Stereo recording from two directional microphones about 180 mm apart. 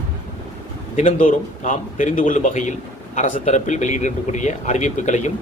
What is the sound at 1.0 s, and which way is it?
Speech, 45° left (ahead or behind).